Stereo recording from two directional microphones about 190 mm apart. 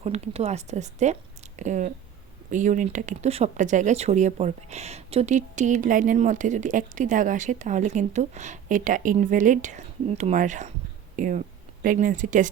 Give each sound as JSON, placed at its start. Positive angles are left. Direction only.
{"t": 0.0, "sound": "speech", "side_deg": -35}